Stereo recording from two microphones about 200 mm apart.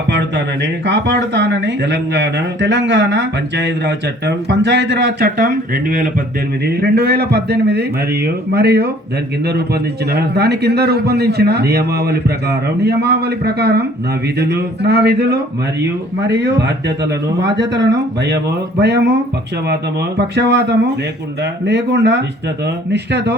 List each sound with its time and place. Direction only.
0.1 s speech: 60° right (ahead or behind)
5.4 s a man's voice: 45° right (ahead or behind)